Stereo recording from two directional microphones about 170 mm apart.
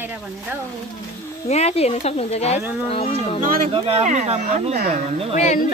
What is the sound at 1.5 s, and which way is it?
Speech, 40° left (ahead or behind).